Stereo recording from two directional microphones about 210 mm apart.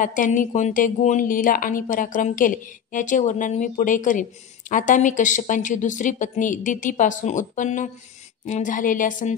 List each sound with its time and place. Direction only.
0.0 s a woman's voice: 40° left (ahead or behind)